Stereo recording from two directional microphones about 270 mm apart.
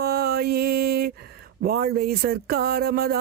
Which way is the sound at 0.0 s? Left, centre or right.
Right.